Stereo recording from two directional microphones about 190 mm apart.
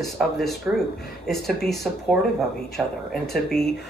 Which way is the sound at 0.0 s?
Centre (ahead or behind).